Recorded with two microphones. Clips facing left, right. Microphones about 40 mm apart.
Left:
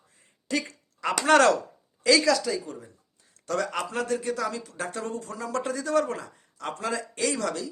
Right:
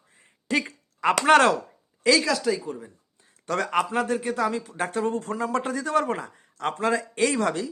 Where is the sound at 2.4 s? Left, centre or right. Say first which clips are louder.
Right 4 dB; centre.